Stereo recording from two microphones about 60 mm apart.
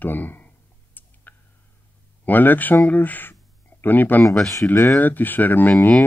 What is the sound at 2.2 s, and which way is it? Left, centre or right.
Speech, left.